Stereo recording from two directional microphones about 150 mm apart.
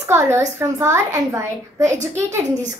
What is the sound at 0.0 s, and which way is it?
A woman's voice, 20° right (ahead or behind).